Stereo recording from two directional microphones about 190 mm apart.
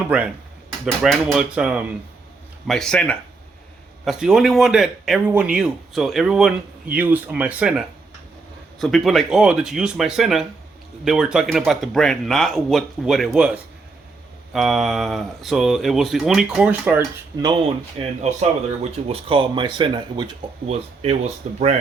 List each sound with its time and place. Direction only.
0.1 s speech: 5° right (ahead or behind)
17.4 s speech: 25° right (ahead or behind)
18.2 s speech: 35° right (ahead or behind)